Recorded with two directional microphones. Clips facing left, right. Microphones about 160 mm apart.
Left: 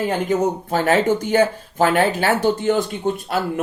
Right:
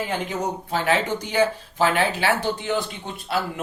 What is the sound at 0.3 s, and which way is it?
Speech, 45° left (ahead or behind).